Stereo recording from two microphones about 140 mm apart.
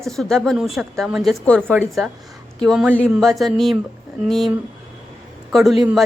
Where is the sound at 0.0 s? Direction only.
Centre (ahead or behind).